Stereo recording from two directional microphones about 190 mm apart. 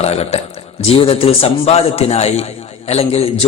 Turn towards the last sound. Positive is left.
turn(degrees=35)  # may be behind; listen again after turning